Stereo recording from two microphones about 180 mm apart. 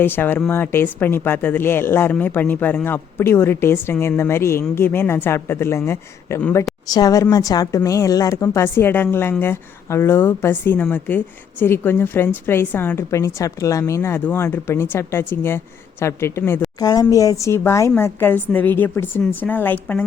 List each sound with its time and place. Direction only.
0.0 s a woman's voice: 10° left (ahead or behind)